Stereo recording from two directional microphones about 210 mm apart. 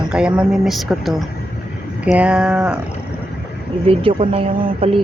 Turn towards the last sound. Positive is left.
turn(degrees=-25)  # may be behind; listen again after turning